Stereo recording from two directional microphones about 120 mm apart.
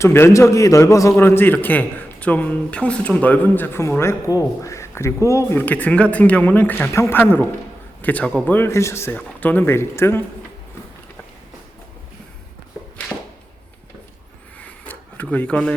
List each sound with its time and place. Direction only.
0.0 s a man's voice: 20° left (ahead or behind)
5.6 s speech: 10° left (ahead or behind)
14.8 s a sound: 15° left (ahead or behind)